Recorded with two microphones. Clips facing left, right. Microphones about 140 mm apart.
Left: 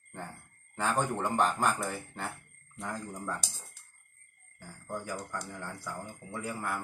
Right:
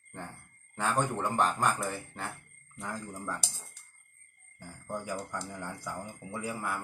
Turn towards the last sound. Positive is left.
turn(degrees=-15)  # may be behind; listen again after turning